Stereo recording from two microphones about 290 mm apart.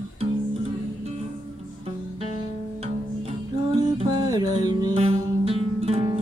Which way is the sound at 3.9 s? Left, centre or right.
Centre.